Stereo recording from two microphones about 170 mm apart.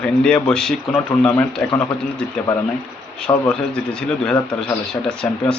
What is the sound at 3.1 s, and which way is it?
A man's voice, 5° left (ahead or behind).